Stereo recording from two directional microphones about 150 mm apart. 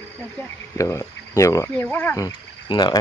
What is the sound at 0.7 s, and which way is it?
Speech, 20° left (ahead or behind).